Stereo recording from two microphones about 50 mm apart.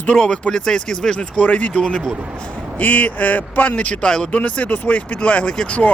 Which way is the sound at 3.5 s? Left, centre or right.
Left.